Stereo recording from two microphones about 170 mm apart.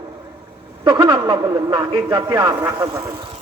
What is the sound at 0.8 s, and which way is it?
A man's voice, 25° right (ahead or behind).